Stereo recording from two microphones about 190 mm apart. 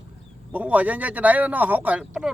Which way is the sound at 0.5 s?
10° right (ahead or behind).